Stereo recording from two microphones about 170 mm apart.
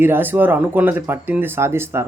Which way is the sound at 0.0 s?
10° right (ahead or behind).